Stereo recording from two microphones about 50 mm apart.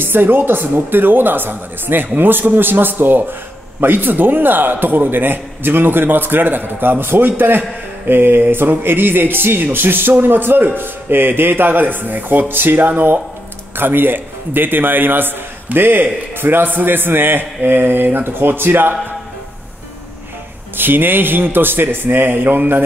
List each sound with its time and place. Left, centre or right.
0.0 s a man's voice: right
20.7 s a man's voice: right